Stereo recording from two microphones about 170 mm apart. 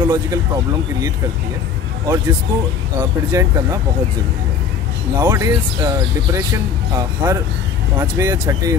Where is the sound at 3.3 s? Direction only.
20° right (ahead or behind).